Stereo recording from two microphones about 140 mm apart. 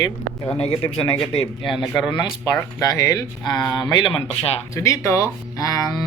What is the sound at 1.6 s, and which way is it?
Speech, centre (ahead or behind).